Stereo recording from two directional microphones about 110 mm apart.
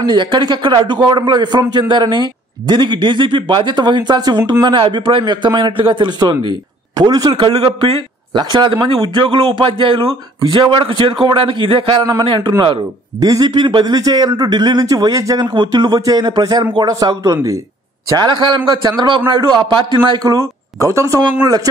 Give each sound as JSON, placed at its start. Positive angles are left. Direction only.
{"t": 0.0, "sound": "a man's voice", "side_deg": -45}
{"t": 7.6, "sound": "a man's voice", "side_deg": -55}
{"t": 8.4, "sound": "a man's voice", "side_deg": -40}